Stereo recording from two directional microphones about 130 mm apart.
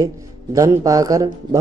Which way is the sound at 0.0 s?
25° right (ahead or behind).